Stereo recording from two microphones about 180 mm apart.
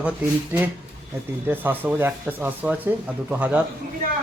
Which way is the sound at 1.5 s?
10° right (ahead or behind).